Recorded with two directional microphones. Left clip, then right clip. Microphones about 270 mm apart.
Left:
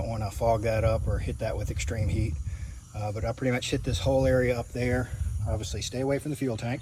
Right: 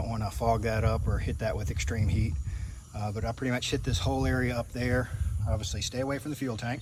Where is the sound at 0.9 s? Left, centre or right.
Right.